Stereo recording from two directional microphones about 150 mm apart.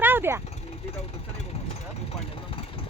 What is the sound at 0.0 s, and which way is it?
Vehicle, 15° right (ahead or behind).